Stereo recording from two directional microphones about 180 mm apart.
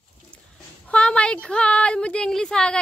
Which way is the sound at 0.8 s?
5° left (ahead or behind).